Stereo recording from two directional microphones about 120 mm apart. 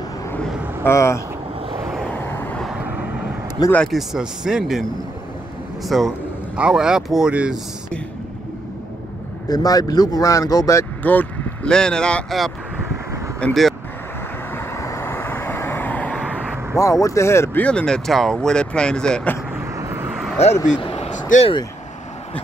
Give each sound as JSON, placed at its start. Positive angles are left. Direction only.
{"t": 0.8, "sound": "speech", "side_deg": 25}
{"t": 2.1, "sound": "vehicle", "side_deg": 15}
{"t": 3.7, "sound": "speech", "side_deg": 5}
{"t": 5.9, "sound": "speech", "side_deg": 0}
{"t": 9.5, "sound": "speech", "side_deg": 30}
{"t": 11.0, "sound": "speech", "side_deg": 15}
{"t": 14.5, "sound": "vehicle", "side_deg": 20}
{"t": 16.7, "sound": "speech", "side_deg": 25}
{"t": 17.6, "sound": "speech", "side_deg": 10}
{"t": 19.6, "sound": "vehicle", "side_deg": -20}
{"t": 20.3, "sound": "speech", "side_deg": 70}
{"t": 20.8, "sound": "a sound", "side_deg": 55}
{"t": 21.1, "sound": "a sound", "side_deg": 90}